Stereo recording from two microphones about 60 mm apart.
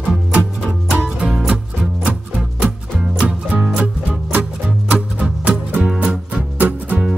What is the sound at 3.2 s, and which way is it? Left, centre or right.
Music, centre.